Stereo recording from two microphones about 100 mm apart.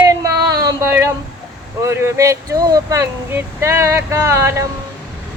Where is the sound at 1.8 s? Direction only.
25° right (ahead or behind).